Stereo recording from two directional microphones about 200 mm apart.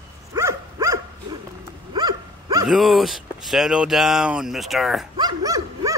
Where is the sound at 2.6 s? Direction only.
Centre (ahead or behind).